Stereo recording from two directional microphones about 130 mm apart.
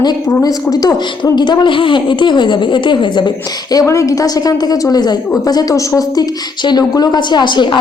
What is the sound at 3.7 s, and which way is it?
A woman's voice, 25° left (ahead or behind).